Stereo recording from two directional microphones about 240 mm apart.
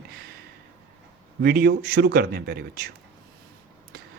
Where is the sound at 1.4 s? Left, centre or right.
Right.